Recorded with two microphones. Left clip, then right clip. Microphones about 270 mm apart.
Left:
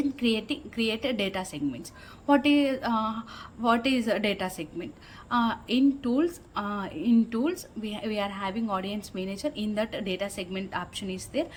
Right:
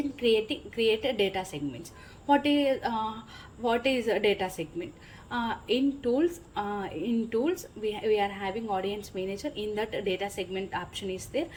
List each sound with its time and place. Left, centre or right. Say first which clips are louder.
0.2 s a woman's voice: right 3 dB; centre